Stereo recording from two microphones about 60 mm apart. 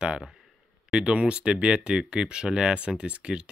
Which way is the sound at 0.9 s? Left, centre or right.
Centre.